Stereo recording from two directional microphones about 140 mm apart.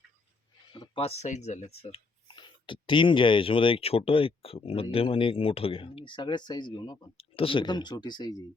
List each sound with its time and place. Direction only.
0.7 s speech: 35° left (ahead or behind)